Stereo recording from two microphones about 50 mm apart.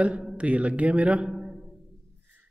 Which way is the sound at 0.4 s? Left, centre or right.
Right.